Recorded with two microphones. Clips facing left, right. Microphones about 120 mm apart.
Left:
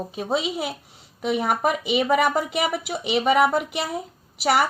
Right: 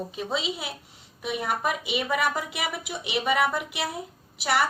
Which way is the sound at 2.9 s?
65° left (ahead or behind).